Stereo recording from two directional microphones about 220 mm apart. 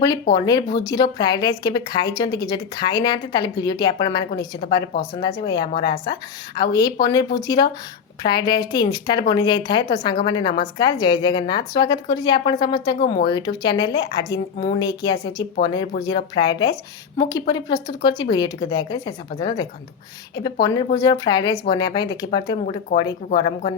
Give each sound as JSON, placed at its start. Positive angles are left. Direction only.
{"t": 0.3, "sound": "speech", "side_deg": 20}